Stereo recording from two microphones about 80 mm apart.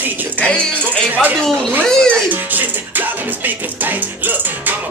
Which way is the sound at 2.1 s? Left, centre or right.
Right.